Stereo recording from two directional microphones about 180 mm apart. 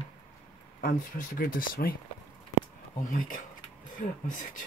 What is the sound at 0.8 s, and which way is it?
Speech, 50° left (ahead or behind).